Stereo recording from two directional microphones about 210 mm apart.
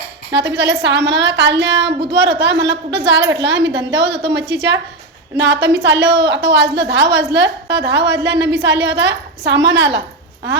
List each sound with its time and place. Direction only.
0.3 s a woman's voice: 55° right (ahead or behind)